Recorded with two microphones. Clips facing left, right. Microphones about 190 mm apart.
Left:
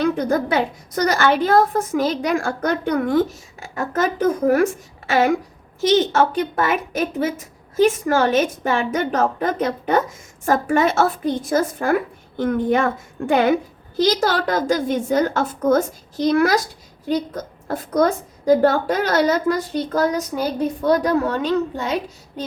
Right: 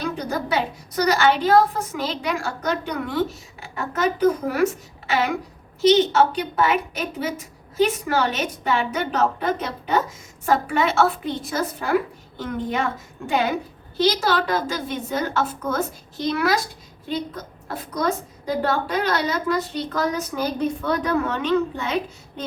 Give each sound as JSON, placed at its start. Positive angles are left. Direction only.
{"t": 0.2, "sound": "a woman's voice", "side_deg": 50}